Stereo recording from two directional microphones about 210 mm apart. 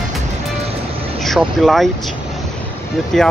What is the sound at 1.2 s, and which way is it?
Speech, centre (ahead or behind).